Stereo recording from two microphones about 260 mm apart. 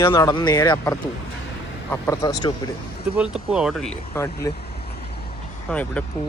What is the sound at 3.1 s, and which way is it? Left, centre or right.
Speech, centre.